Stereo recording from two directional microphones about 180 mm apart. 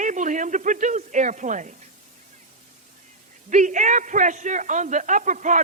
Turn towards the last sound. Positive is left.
turn(degrees=-45)  # may be behind; listen again after turning